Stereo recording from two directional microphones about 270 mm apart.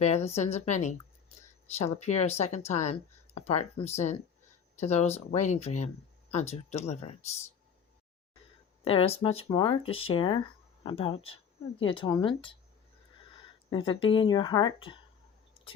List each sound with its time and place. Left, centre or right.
0.3 s speech: left
8.8 s speech: left